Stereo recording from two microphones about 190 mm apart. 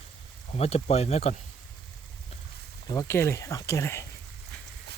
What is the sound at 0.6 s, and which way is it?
Speech, 35° left (ahead or behind).